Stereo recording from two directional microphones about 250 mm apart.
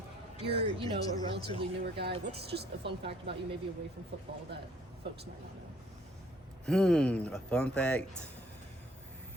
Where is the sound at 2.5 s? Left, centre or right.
Right.